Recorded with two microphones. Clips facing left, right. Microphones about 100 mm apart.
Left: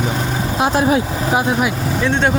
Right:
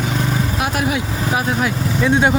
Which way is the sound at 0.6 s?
30° left (ahead or behind).